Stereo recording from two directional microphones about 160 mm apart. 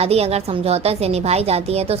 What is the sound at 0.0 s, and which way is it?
A woman's voice, 40° right (ahead or behind).